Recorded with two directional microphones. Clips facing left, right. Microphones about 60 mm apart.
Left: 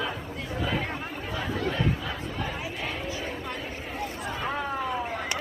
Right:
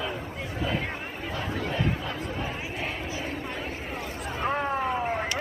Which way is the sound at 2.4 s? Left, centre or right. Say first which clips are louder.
Even; right.